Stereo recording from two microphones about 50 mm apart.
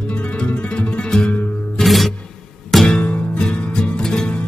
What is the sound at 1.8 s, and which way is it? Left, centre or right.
Music, centre.